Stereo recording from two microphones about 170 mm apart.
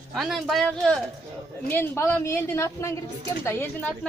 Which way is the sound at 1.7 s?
15° left (ahead or behind).